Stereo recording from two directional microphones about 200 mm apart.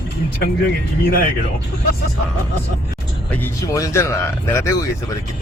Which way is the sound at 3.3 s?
10° left (ahead or behind).